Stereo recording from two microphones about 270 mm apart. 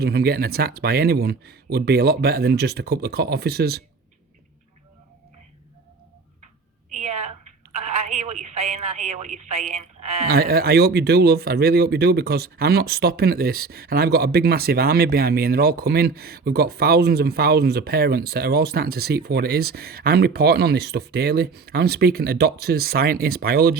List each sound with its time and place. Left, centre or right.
0.0 s speech: right
6.9 s a sound: right
7.8 s a woman's voice: right